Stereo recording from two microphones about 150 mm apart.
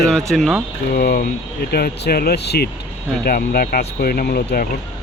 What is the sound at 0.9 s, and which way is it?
Speech, 70° left (ahead or behind).